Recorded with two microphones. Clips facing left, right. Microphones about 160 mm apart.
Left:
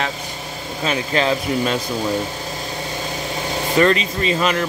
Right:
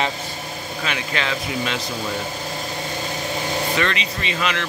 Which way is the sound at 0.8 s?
35° left (ahead or behind).